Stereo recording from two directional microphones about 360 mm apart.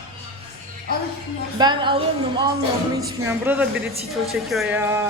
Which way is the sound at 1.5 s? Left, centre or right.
Centre.